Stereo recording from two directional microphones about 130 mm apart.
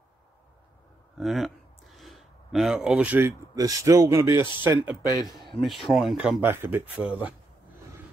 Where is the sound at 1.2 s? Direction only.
Centre (ahead or behind).